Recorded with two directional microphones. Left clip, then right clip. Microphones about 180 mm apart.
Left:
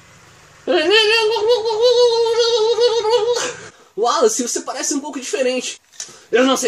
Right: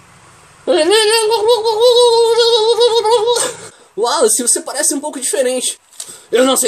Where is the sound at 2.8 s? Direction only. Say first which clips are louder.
Right 4 dB; 15° right (ahead or behind).